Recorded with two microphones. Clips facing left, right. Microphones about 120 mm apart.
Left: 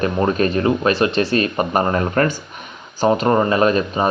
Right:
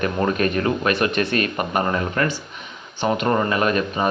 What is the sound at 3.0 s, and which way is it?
Speech, 30° left (ahead or behind).